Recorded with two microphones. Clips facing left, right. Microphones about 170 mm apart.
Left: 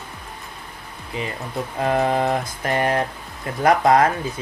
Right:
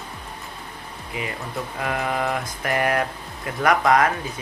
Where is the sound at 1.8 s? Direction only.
30° left (ahead or behind).